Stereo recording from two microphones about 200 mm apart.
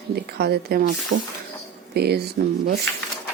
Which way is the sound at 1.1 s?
40° right (ahead or behind).